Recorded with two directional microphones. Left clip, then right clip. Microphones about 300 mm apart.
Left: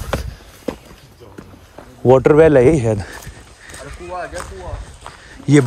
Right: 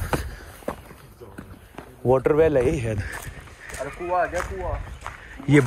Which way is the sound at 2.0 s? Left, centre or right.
Left.